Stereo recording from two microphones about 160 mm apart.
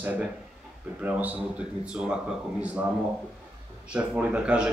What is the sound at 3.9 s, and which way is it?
Speech, 5° right (ahead or behind).